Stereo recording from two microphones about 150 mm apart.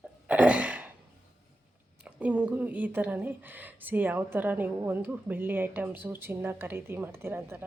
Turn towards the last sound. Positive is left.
turn(degrees=-15)  # may be behind; listen again after turning